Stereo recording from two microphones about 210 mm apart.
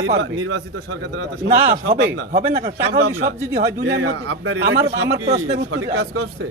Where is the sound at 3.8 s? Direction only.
75° right (ahead or behind); by 4.5 s 90° right.